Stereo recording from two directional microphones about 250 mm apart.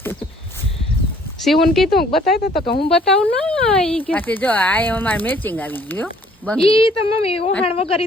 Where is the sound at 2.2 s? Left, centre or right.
Left.